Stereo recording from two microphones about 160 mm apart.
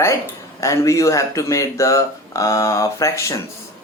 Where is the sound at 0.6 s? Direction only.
20° left (ahead or behind).